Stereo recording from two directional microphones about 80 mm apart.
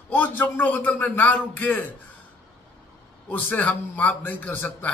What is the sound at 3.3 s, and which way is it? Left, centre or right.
A man's voice, centre.